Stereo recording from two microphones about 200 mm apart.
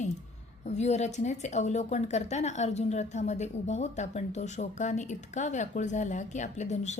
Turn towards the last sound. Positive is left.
turn(degrees=35)  # may be behind; listen again after turning